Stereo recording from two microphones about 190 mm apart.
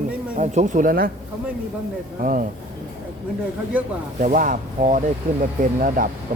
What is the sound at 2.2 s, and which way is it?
Speech, 45° right (ahead or behind).